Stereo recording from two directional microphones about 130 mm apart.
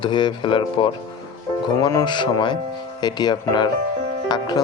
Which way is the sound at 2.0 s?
35° left (ahead or behind).